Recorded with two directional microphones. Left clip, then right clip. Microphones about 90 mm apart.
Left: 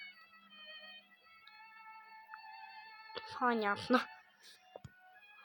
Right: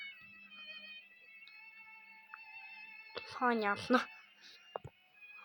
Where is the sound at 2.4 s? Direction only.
50° right (ahead or behind).